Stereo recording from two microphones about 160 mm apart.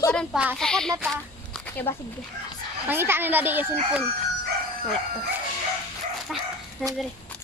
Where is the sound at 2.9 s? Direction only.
15° right (ahead or behind).